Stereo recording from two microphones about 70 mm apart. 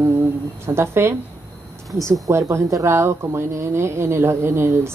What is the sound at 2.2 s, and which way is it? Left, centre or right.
Speech, right.